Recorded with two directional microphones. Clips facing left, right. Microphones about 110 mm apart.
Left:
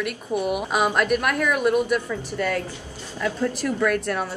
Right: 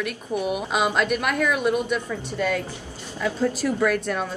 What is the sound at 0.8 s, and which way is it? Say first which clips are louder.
Speech: left 2 dB; 10° right (ahead or behind).